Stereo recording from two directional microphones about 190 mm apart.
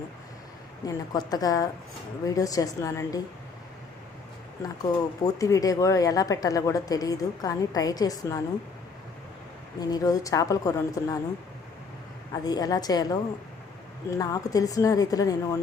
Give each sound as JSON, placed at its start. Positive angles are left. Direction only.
{"t": 0.9, "sound": "speech", "side_deg": 20}
{"t": 4.8, "sound": "speech", "side_deg": 20}
{"t": 9.8, "sound": "speech", "side_deg": 20}
{"t": 12.3, "sound": "a woman's voice", "side_deg": 20}